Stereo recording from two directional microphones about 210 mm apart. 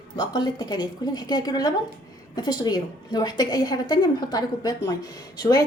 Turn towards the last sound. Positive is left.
turn(degrees=20)  # may be behind; listen again after turning